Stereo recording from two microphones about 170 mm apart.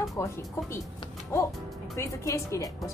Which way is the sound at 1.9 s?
20° left (ahead or behind).